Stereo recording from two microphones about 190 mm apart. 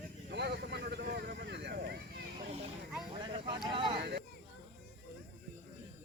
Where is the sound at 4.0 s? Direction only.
55° right (ahead or behind).